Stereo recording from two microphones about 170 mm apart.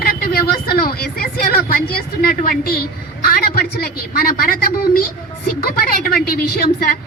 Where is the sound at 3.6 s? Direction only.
65° left (ahead or behind).